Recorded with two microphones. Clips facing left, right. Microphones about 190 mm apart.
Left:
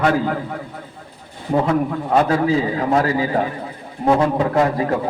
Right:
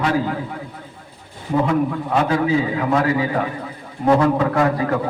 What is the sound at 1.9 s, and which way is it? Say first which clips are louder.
A man's voice: left 2 dB; 40° left (ahead or behind).